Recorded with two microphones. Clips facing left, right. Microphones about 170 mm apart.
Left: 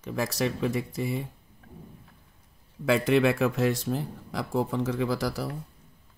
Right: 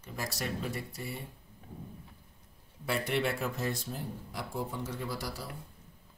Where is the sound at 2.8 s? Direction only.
90° left.